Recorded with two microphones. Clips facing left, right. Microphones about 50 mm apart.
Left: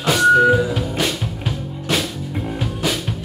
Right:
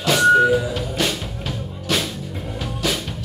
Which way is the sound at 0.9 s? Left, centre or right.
Centre.